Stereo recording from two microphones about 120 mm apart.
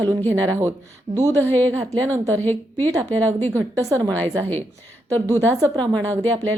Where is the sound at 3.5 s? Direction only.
25° right (ahead or behind).